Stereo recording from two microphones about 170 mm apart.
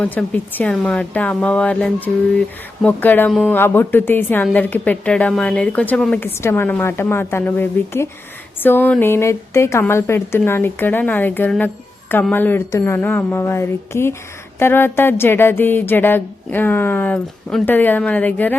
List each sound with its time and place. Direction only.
0.0 s speech: 5° left (ahead or behind)